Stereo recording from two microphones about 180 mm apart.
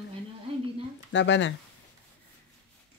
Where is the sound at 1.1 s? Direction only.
90° left.